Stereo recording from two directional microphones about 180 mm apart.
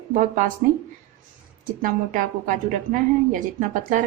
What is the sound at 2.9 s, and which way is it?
A woman's voice, 45° right (ahead or behind).